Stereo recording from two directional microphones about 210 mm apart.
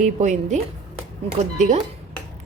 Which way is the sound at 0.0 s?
35° right (ahead or behind).